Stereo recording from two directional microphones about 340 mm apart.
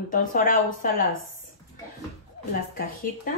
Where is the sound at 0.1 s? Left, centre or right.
Left.